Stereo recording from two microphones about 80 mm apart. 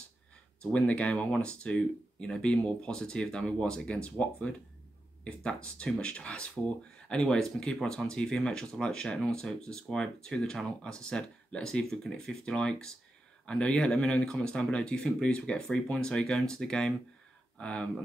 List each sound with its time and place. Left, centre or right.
0.6 s speech: centre